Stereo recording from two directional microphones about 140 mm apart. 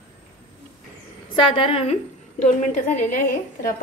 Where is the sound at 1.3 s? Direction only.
35° left (ahead or behind).